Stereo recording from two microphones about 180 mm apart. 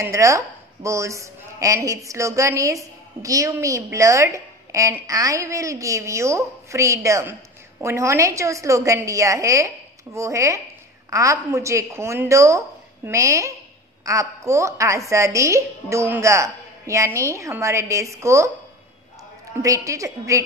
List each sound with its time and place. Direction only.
0.0 s a woman's voice: 15° right (ahead or behind)
19.6 s a woman's voice: 15° right (ahead or behind)